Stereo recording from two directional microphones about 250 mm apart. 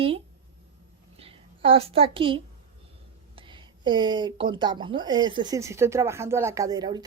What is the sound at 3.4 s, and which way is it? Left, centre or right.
Speech, centre.